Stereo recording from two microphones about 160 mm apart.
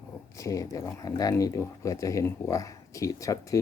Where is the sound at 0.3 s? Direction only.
20° left (ahead or behind).